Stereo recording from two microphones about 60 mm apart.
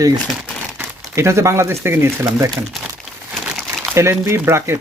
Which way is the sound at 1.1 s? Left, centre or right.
Right.